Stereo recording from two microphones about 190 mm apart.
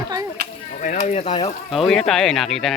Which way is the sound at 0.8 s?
40° left (ahead or behind).